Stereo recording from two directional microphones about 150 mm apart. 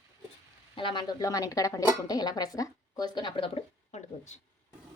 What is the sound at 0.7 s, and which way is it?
Speech, 30° left (ahead or behind).